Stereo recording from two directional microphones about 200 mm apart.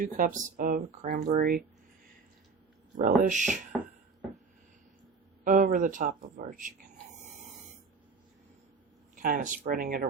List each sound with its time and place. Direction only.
0.0 s speech: 40° right (ahead or behind)
3.0 s speech: 40° right (ahead or behind)
5.5 s speech: 40° right (ahead or behind)
9.1 s speech: 40° right (ahead or behind)